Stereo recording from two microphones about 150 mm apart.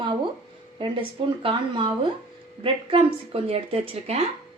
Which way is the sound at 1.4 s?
35° right (ahead or behind).